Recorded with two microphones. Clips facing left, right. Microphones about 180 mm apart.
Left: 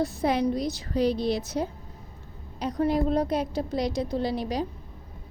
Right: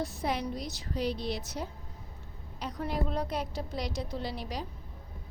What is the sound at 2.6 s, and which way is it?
A woman's voice, 40° left (ahead or behind).